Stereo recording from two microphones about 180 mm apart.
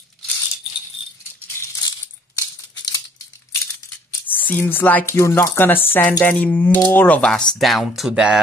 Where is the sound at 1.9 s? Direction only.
20° left (ahead or behind).